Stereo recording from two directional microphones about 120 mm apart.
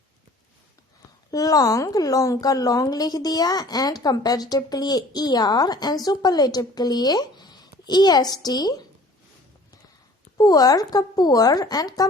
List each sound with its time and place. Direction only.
1.3 s a woman's voice: 30° left (ahead or behind)
10.3 s a woman's voice: 35° left (ahead or behind)